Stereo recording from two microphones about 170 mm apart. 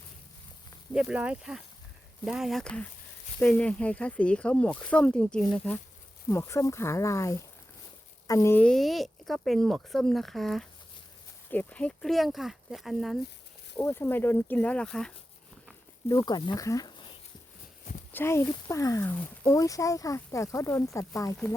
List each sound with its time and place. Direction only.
0.9 s speech: 5° right (ahead or behind)
13.7 s speech: 15° left (ahead or behind)
16.0 s speech: 20° left (ahead or behind)
18.1 s speech: 15° left (ahead or behind)